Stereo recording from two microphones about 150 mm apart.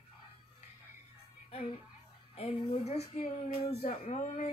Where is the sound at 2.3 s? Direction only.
40° left (ahead or behind).